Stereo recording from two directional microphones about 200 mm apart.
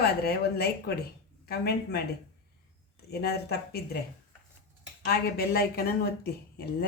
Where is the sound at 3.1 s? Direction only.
50° left (ahead or behind).